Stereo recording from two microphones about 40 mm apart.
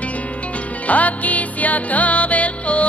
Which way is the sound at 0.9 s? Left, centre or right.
Left.